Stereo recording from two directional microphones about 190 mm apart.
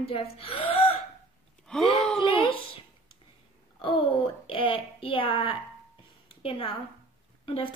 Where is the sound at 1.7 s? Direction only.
Centre (ahead or behind).